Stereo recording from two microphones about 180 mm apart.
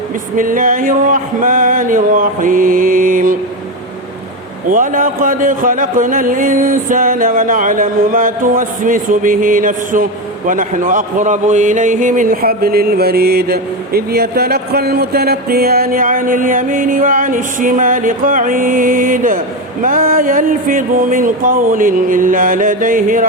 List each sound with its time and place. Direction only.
0.3 s speech: 50° right (ahead or behind)
4.7 s speech: 45° right (ahead or behind)